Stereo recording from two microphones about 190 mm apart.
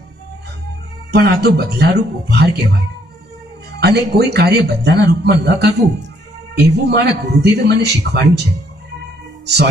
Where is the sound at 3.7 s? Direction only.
60° right (ahead or behind).